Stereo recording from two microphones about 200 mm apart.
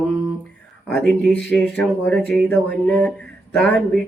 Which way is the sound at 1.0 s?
Centre (ahead or behind).